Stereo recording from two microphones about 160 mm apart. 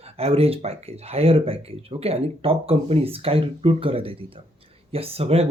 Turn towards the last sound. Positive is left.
turn(degrees=-40)  # may be behind; listen again after turning